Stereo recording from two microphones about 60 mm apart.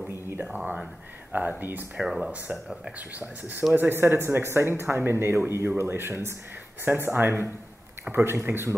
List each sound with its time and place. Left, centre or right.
0.1 s a sound: right
1.3 s speech: right
2.0 s speech: centre
3.2 s speech: right